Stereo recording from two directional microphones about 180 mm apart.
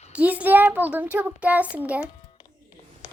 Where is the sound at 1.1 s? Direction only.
10° right (ahead or behind).